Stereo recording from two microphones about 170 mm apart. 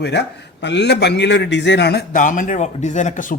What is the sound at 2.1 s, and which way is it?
Speech, 50° left (ahead or behind).